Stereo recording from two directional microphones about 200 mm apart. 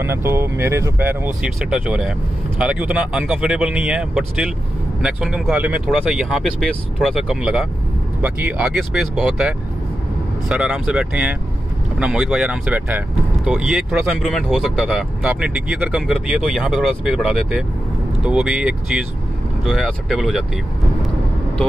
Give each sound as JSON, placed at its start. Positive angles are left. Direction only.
{"t": 0.0, "sound": "speech", "side_deg": -10}